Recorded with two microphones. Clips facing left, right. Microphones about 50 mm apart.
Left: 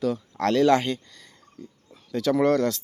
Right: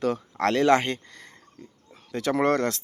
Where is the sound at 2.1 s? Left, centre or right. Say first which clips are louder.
Left 2 dB; right.